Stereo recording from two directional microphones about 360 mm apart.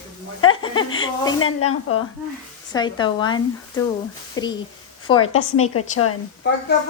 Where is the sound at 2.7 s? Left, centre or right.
Centre.